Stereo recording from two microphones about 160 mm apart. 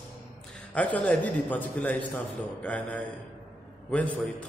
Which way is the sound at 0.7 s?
10° left (ahead or behind).